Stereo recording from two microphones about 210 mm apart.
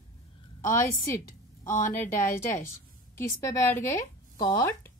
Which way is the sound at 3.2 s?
15° left (ahead or behind).